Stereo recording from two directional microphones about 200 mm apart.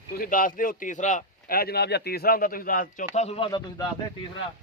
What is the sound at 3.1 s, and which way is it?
Speech, 35° left (ahead or behind).